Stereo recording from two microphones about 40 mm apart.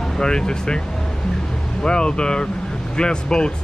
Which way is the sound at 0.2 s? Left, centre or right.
Centre.